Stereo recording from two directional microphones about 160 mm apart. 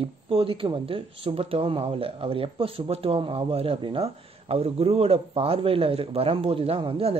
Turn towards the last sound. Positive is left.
turn(degrees=-35)  # may be behind; listen again after turning